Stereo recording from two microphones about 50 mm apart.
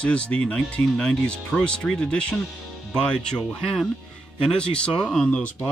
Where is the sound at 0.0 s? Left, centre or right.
Left.